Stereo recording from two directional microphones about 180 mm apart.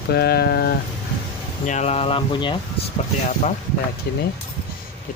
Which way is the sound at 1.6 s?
40° left (ahead or behind).